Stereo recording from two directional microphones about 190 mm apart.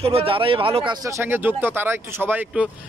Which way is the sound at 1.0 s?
15° right (ahead or behind).